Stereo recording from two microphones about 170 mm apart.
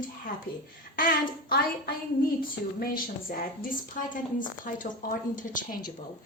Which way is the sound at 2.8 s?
60° left (ahead or behind).